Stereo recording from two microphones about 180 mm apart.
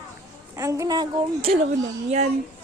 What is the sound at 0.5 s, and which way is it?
Speech, 15° right (ahead or behind).